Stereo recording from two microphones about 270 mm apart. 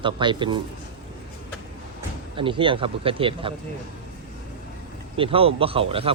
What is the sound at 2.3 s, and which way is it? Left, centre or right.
Speech, centre.